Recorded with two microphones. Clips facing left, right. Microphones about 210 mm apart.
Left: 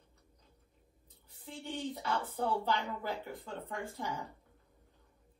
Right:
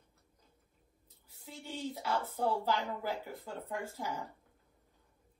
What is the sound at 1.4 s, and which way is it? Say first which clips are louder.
Speech: left 1 dB; centre (ahead or behind).